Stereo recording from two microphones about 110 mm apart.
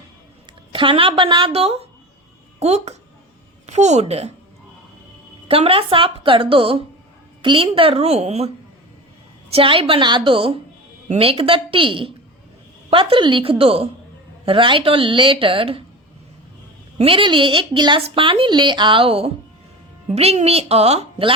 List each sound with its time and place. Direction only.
0.7 s a woman's voice: 55° right (ahead or behind)
2.6 s a woman's voice: 75° right (ahead or behind)
3.7 s a woman's voice: 90° right
5.5 s a woman's voice: 60° right (ahead or behind)
9.5 s a woman's voice: 55° right (ahead or behind)
17.0 s speech: 55° right (ahead or behind)
20.1 s a woman's voice: 70° right (ahead or behind)